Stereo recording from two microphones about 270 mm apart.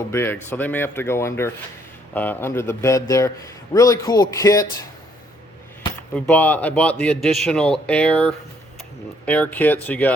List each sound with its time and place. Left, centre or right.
0.1 s a man's voice: centre
6.1 s a man's voice: centre